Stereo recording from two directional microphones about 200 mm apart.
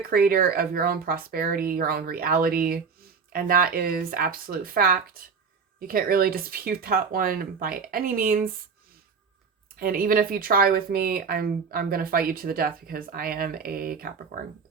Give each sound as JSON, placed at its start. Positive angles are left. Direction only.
{"t": 0.1, "sound": "speech", "side_deg": -45}
{"t": 9.7, "sound": "speech", "side_deg": -45}